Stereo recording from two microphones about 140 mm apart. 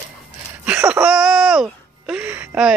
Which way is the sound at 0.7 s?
10° right (ahead or behind).